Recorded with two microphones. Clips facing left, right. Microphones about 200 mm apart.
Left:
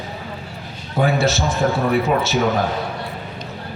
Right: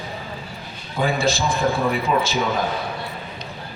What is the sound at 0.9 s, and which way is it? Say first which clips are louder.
Speech: left 3 dB; 65° left (ahead or behind).